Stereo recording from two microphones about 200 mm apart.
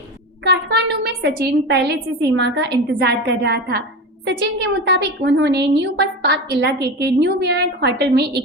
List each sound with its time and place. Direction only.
0.4 s a woman's voice: 55° right (ahead or behind)